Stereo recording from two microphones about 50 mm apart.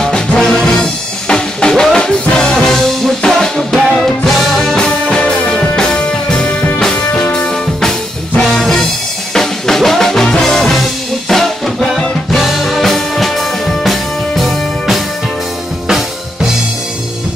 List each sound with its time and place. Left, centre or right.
0.0 s music: centre
4.7 s music: centre
6.8 s music: centre
7.2 s music: left
8.4 s music: centre